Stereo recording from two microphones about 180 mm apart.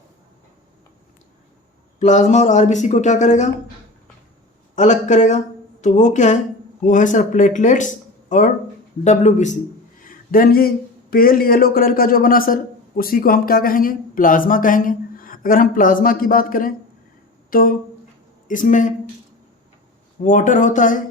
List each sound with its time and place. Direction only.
2.0 s speech: 40° left (ahead or behind)
4.7 s speech: 40° left (ahead or behind)
10.0 s a sound: 50° left (ahead or behind)
11.1 s speech: 55° left (ahead or behind)
20.2 s speech: 45° left (ahead or behind)